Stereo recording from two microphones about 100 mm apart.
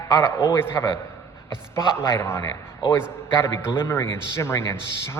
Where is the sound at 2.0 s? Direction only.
25° left (ahead or behind).